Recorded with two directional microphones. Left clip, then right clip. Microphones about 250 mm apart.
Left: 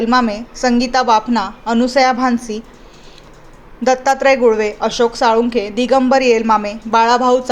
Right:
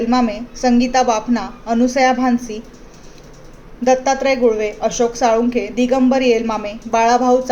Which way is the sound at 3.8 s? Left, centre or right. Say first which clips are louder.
Left 2 dB; centre.